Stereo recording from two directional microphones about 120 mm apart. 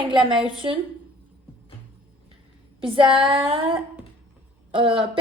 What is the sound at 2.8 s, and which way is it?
A woman's voice, 45° right (ahead or behind).